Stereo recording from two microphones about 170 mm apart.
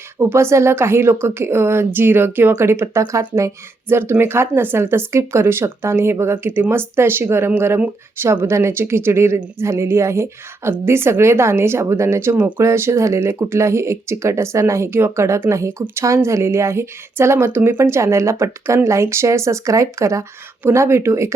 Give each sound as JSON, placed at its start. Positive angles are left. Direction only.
{"t": 0.2, "sound": "a woman's voice", "side_deg": -15}